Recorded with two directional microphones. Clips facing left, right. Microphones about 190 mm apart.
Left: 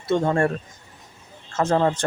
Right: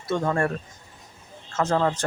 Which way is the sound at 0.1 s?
25° left (ahead or behind).